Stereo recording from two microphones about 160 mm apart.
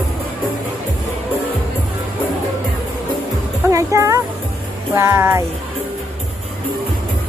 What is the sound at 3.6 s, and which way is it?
Music, 20° right (ahead or behind).